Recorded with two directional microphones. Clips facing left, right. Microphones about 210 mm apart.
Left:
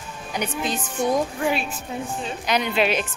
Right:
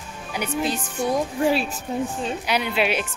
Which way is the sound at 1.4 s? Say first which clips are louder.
Right 3 dB; 35° right (ahead or behind).